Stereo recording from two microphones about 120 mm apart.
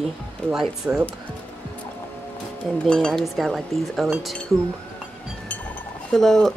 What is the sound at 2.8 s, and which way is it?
Speech, 5° left (ahead or behind).